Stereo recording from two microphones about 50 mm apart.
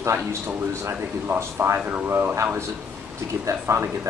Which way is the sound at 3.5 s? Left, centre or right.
Right.